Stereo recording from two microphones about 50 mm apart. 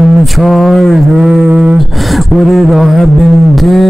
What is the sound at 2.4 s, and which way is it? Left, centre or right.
Music, centre.